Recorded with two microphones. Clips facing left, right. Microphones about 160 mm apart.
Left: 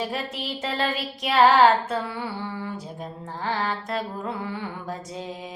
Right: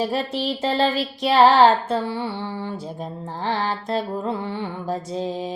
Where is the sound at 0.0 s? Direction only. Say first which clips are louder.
Right 6 dB; 30° right (ahead or behind).